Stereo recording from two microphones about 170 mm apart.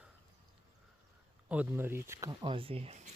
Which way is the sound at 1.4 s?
10° right (ahead or behind).